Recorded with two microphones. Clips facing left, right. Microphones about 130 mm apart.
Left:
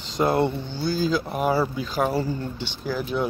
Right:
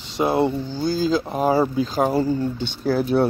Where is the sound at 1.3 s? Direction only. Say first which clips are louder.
Right 4 dB; 25° right (ahead or behind); by 3.2 s 40° right (ahead or behind).